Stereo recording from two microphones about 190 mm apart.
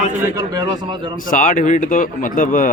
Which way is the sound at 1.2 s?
45° left (ahead or behind).